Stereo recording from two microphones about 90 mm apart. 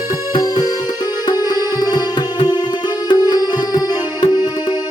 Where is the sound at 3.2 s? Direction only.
45° left (ahead or behind).